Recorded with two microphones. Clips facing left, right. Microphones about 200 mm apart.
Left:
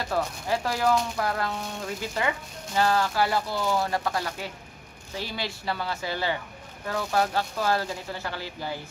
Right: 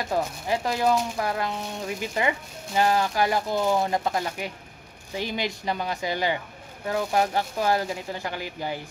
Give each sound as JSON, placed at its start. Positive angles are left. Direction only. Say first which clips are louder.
{"t": 0.0, "sound": "speech", "louder": "right 1 dB", "side_deg": -15}